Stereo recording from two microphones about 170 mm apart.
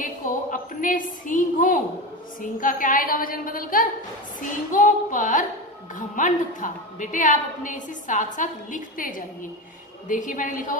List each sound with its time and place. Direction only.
0.0 s a woman's voice: 50° left (ahead or behind)